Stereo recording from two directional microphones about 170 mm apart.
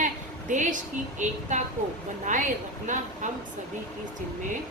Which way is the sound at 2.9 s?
45° right (ahead or behind).